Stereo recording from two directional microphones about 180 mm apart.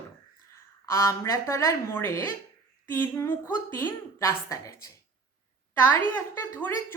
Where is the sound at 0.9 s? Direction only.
15° left (ahead or behind).